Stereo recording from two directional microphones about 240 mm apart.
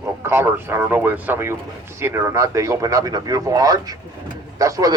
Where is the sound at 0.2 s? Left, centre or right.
Centre.